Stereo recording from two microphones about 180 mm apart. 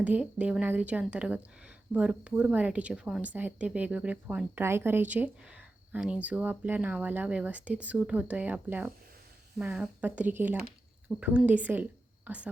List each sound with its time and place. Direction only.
0.0 s a woman's voice: 5° right (ahead or behind)